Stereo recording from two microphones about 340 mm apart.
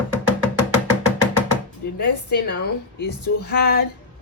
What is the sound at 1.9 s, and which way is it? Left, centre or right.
A woman's voice, left.